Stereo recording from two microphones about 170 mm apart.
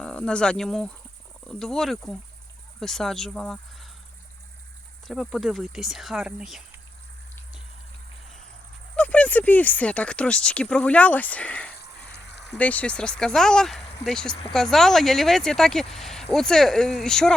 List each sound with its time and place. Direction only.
0.0 s cricket: 5° left (ahead or behind)
1.5 s speech: 5° left (ahead or behind)
5.0 s speech: centre (ahead or behind)
9.0 s speech: 10° left (ahead or behind)
11.8 s a sound: 80° left
12.5 s speech: 10° left (ahead or behind)